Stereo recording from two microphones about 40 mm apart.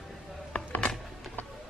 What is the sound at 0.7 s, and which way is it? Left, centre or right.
Music, left.